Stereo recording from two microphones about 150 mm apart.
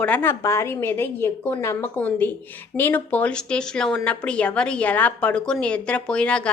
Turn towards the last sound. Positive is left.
turn(degrees=5)  # may be behind; listen again after turning